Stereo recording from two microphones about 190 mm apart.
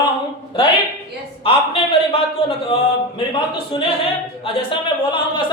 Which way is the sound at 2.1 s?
30° left (ahead or behind).